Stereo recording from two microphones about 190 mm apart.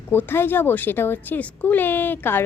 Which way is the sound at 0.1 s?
10° left (ahead or behind).